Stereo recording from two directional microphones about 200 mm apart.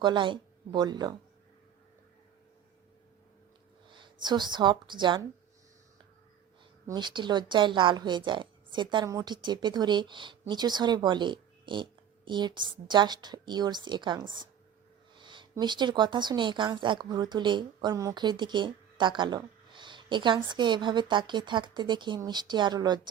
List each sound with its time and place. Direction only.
0.0 s speech: 25° right (ahead or behind)
4.0 s speech: 20° right (ahead or behind)
6.8 s speech: 20° right (ahead or behind)